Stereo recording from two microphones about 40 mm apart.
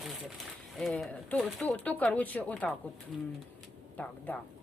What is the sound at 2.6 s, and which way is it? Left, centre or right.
Speech, left.